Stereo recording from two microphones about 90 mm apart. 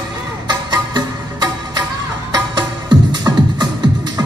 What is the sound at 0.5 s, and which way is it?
Music, 50° right (ahead or behind).